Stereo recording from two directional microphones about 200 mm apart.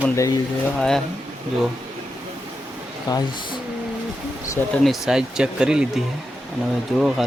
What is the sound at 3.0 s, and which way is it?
Speech, 20° left (ahead or behind).